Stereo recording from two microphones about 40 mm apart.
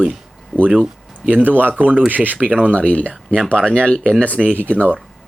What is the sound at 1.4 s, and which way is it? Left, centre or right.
Speech, right.